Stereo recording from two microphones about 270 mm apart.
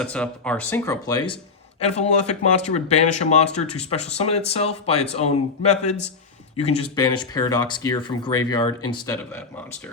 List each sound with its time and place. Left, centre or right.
0.0 s speech: centre